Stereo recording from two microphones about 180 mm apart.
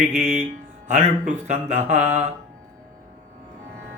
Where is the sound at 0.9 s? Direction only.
45° right (ahead or behind).